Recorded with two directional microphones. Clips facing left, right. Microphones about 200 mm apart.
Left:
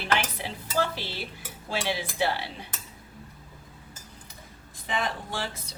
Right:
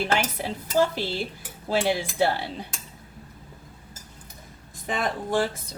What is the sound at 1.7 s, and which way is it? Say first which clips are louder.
Speech: right 6 dB; 45° right (ahead or behind).